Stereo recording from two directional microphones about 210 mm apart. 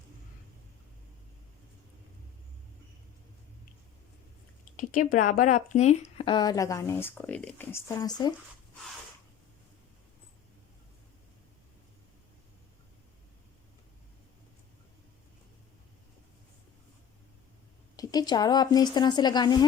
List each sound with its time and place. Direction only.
4.8 s speech: 40° left (ahead or behind); by 8.3 s 15° left (ahead or behind)
17.9 s speech: 15° left (ahead or behind)